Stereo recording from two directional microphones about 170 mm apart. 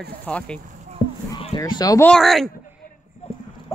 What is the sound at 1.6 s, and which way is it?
Speech, 20° left (ahead or behind).